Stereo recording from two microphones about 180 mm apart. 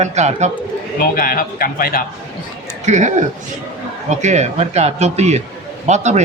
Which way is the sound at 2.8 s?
40° right (ahead or behind).